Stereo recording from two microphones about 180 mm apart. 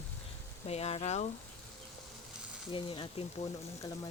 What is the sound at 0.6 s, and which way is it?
Speech, 35° left (ahead or behind).